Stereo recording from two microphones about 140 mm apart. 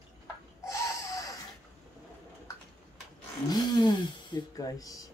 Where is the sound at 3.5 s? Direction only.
30° left (ahead or behind).